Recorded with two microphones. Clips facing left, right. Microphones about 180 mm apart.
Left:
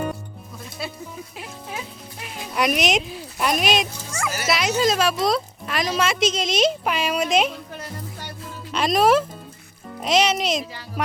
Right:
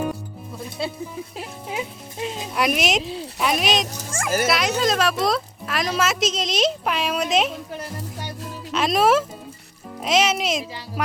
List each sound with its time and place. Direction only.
0.8 s speech: 25° right (ahead or behind)
2.6 s speech: centre (ahead or behind)
3.0 s speech: 25° right (ahead or behind)
3.3 s speech: centre (ahead or behind)
4.1 s a child's voice: 50° right (ahead or behind)
4.4 s speech: centre (ahead or behind)
8.7 s speech: centre (ahead or behind)